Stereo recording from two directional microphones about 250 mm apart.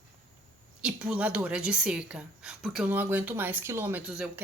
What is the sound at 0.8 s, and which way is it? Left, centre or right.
A woman's voice, centre.